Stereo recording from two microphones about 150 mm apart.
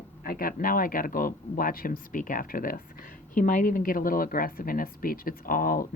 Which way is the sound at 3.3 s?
60° left (ahead or behind).